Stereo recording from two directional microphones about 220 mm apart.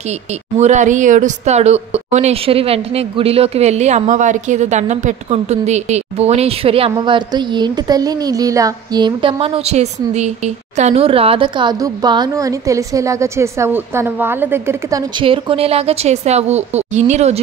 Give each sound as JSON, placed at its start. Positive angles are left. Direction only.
{"t": 0.1, "sound": "a woman's voice", "side_deg": -30}